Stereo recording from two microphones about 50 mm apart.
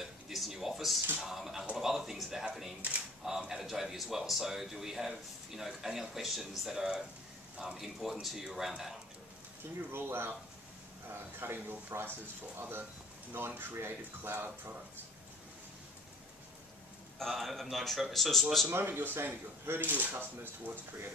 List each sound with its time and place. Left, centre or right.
0.0 s a sound: centre
1.2 s a man's voice: centre
9.9 s speech: right
11.3 s speech: right
17.2 s a man's voice: centre
18.7 s speech: right